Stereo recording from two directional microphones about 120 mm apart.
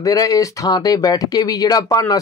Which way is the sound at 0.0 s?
30° left (ahead or behind).